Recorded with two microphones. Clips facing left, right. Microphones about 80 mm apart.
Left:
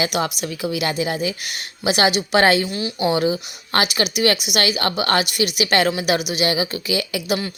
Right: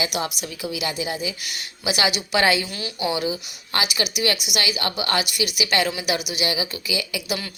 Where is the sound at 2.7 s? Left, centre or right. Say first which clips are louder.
Left 5 dB; left.